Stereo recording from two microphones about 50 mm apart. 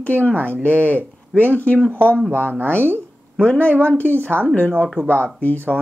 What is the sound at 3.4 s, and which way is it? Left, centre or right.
Speech, left.